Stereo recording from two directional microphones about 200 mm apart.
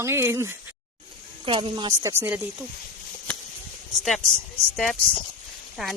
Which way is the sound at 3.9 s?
Centre (ahead or behind).